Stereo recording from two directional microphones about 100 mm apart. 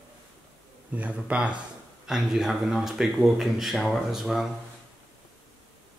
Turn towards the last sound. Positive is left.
turn(degrees=-5)  # may be behind; listen again after turning